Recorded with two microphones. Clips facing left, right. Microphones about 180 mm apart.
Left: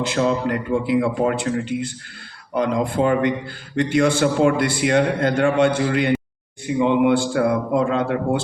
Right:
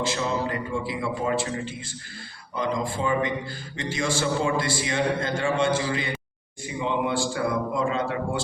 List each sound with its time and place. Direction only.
0.1 s a man's voice: 65° left (ahead or behind)